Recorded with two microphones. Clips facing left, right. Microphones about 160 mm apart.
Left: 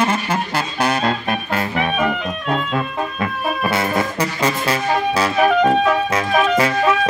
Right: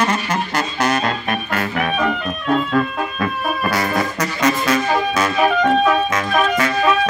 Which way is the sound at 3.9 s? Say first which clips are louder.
Left 1 dB; 30° left (ahead or behind).